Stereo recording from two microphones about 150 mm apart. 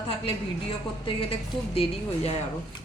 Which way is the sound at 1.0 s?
35° left (ahead or behind).